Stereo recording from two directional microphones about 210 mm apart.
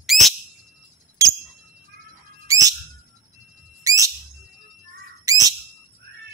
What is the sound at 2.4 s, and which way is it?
Bird, 15° right (ahead or behind).